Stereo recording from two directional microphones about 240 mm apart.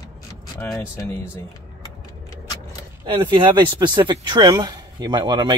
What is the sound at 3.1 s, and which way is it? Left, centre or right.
Speech, right.